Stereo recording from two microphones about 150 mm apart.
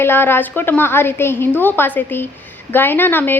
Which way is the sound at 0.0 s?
15° left (ahead or behind).